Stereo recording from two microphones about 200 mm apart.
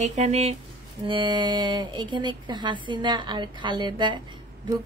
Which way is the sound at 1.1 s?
25° right (ahead or behind).